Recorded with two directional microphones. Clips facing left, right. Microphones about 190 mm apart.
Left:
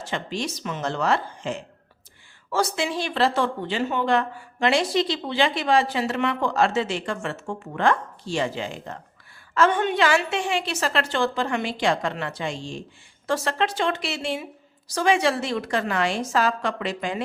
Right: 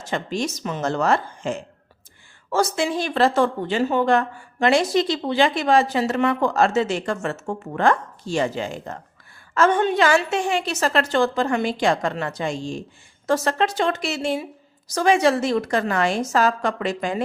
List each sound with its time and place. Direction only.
0.0 s speech: 45° right (ahead or behind)